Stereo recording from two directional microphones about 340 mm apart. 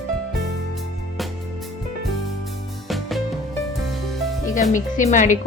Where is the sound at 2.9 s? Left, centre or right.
Centre.